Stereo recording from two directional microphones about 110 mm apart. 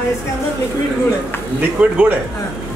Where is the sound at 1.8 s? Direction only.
10° right (ahead or behind).